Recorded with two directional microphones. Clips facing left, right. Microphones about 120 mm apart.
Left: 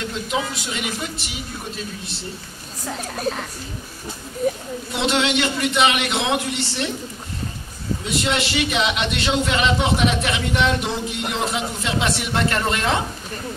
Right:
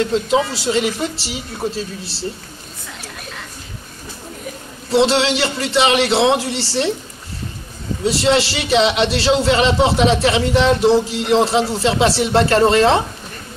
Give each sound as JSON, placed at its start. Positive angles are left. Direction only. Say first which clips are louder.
{"t": 0.0, "sound": "a man's voice", "louder": "right 8 dB", "side_deg": -30}
{"t": 2.9, "sound": "a woman's voice", "louder": "left 10 dB", "side_deg": 40}
{"t": 4.9, "sound": "a man's voice", "louder": "right 6 dB", "side_deg": -30}
{"t": 8.0, "sound": "a man's voice", "louder": "right 8 dB", "side_deg": -30}